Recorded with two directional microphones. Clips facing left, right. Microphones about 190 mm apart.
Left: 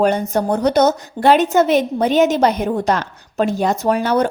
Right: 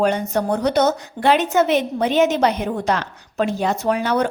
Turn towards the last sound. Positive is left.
turn(degrees=40)  # may be behind; listen again after turning